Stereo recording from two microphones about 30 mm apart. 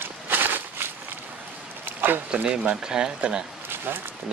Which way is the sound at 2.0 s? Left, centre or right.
Right.